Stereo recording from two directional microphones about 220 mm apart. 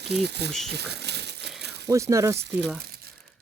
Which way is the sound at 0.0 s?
50° right (ahead or behind).